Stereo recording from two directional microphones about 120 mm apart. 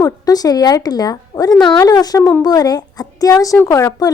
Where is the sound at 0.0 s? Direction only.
30° left (ahead or behind).